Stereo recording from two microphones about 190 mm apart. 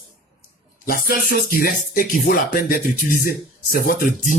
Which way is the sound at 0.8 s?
50° left (ahead or behind).